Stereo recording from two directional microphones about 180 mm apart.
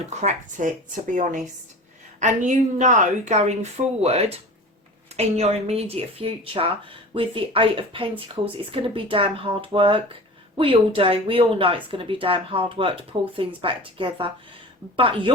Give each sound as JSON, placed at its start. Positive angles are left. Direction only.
{"t": 0.1, "sound": "speech", "side_deg": -40}